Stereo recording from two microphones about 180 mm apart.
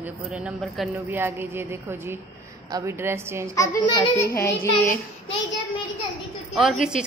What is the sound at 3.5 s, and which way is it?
Speech, 20° left (ahead or behind).